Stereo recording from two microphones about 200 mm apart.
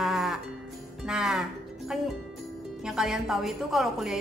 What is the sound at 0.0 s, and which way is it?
Music, centre (ahead or behind).